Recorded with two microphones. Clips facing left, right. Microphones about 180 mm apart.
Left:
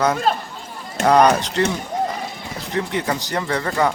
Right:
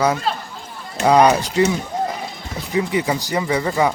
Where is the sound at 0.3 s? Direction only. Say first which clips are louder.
Left 3 dB; 45° left (ahead or behind).